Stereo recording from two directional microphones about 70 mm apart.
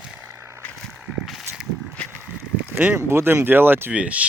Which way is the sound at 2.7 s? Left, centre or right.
Right.